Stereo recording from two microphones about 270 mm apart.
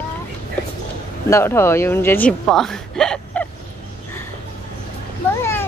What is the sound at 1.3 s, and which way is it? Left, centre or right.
A woman's voice, centre.